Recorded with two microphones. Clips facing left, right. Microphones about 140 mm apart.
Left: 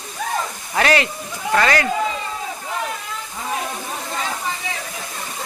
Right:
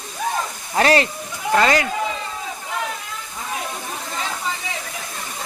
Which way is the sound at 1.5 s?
20° right (ahead or behind).